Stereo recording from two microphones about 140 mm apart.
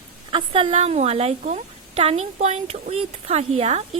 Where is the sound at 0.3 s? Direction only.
40° right (ahead or behind).